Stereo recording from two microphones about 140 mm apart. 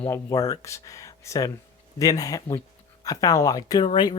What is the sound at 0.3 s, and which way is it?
Speech, 25° left (ahead or behind).